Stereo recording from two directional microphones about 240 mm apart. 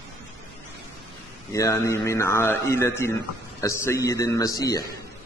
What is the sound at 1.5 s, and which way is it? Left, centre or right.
A man's voice, centre.